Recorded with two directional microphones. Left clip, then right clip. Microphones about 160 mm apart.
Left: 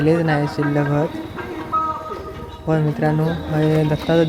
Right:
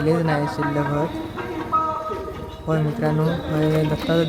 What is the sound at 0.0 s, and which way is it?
Speech, 10° left (ahead or behind).